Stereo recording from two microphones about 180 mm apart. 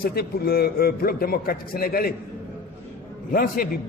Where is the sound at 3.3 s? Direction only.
50° left (ahead or behind).